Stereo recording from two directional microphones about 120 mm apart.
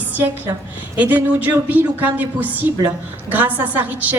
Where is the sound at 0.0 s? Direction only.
15° right (ahead or behind).